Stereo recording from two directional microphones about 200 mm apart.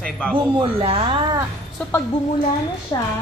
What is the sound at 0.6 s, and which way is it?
Speech, 25° right (ahead or behind).